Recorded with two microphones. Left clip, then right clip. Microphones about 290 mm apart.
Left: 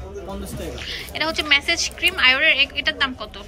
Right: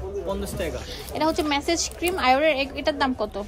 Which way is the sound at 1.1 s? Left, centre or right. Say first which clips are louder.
Left 4 dB; centre.